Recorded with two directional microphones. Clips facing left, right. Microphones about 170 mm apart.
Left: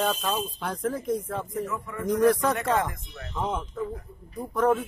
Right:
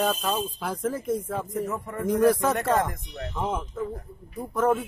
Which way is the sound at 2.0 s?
Centre (ahead or behind).